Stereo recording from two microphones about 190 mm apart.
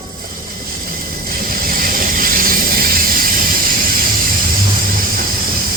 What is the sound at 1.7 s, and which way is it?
Vehicle, 50° right (ahead or behind).